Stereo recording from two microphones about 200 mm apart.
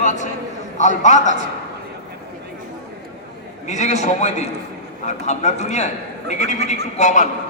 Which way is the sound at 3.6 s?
35° left (ahead or behind).